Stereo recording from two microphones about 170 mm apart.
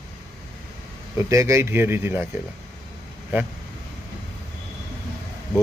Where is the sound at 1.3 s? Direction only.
20° right (ahead or behind).